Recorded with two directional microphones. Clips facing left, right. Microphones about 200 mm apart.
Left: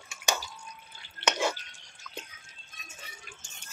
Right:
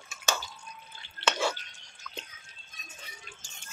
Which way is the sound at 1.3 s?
15° left (ahead or behind).